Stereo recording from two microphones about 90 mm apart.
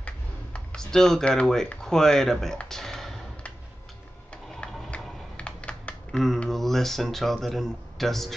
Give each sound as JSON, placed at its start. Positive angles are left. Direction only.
{"t": 0.0, "sound": "speech", "side_deg": 10}
{"t": 2.6, "sound": "a sound", "side_deg": 5}
{"t": 4.9, "sound": "typing", "side_deg": 15}
{"t": 5.4, "sound": "speech", "side_deg": 15}